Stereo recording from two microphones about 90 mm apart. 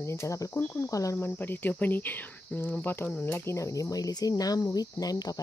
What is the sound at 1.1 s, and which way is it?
Speech, 25° left (ahead or behind).